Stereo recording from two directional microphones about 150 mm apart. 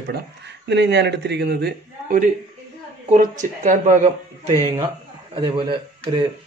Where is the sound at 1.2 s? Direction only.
90° right.